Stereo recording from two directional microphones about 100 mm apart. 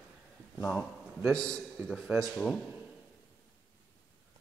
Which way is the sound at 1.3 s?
10° left (ahead or behind).